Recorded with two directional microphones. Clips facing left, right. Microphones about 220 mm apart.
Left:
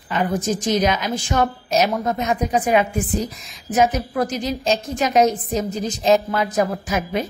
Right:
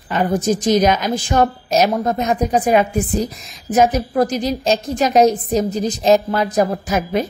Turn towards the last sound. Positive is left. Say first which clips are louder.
# right 4 dB
turn(degrees=-40)  # may be behind; listen again after turning